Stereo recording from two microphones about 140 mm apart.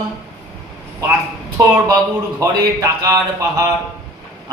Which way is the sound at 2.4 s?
20° right (ahead or behind).